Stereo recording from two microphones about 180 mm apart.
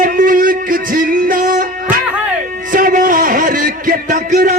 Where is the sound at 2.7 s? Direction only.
50° right (ahead or behind).